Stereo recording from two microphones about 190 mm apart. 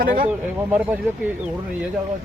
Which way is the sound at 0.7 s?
10° right (ahead or behind).